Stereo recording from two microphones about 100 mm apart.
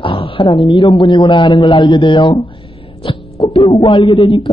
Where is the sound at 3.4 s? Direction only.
55° left (ahead or behind).